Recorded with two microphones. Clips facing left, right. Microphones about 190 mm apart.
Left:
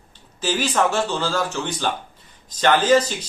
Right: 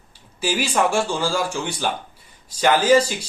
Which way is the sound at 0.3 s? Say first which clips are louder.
Even; 10° right (ahead or behind).